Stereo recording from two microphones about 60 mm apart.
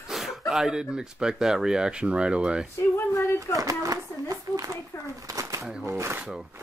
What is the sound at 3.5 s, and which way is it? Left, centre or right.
Speech, right.